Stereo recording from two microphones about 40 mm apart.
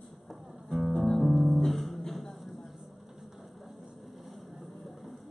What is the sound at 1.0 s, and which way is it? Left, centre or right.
Music, centre.